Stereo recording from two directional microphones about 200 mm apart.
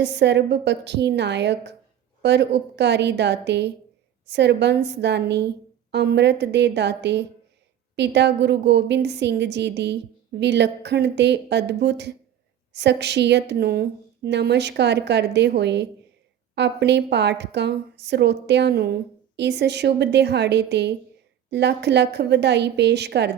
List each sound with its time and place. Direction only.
0.0 s a woman's voice: 60° right (ahead or behind)